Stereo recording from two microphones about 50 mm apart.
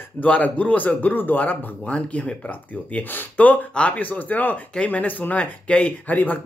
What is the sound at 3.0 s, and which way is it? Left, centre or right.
Speech, left.